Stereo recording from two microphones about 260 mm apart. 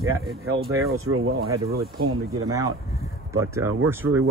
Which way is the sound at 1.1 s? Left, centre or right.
Right.